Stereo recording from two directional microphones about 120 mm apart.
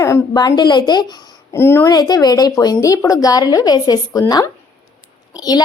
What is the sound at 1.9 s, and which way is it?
A woman's voice, 35° left (ahead or behind).